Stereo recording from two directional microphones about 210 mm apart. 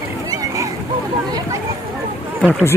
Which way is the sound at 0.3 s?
15° right (ahead or behind).